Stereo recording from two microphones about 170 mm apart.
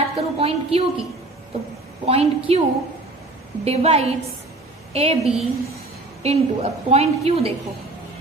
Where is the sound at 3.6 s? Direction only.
35° right (ahead or behind).